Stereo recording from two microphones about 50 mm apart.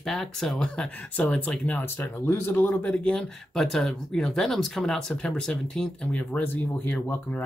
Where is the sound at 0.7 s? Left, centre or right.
Left.